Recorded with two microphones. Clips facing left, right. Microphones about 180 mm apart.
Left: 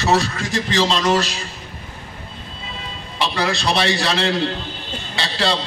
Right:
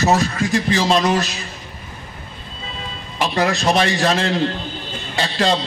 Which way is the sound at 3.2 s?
45° right (ahead or behind).